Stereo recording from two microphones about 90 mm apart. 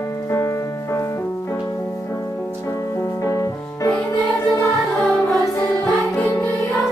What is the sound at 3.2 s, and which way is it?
Music, 35° left (ahead or behind).